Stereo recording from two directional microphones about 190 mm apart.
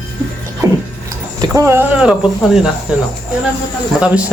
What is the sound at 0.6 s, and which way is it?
Music, 15° right (ahead or behind).